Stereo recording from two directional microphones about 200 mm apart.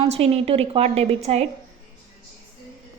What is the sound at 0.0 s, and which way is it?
A woman's voice, 30° right (ahead or behind).